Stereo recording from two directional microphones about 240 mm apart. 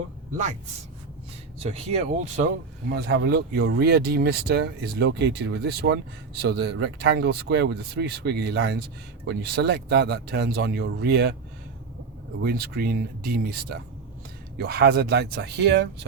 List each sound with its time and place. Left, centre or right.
1.5 s speech: right
2.9 s speech: right
12.4 s speech: right